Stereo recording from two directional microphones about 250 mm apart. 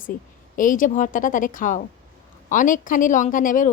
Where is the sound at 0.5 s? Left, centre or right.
Left.